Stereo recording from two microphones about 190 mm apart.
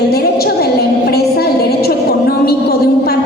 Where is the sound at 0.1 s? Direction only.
55° left (ahead or behind).